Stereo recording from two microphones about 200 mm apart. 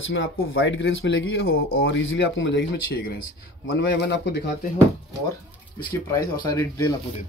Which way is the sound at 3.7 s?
60° left (ahead or behind).